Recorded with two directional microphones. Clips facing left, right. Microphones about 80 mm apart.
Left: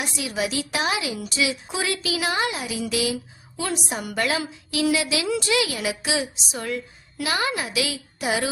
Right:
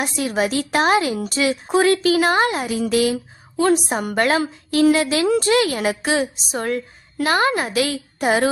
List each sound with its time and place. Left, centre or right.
0.2 s speech: right